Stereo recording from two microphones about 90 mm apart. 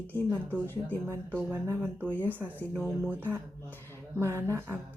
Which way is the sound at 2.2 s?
20° right (ahead or behind).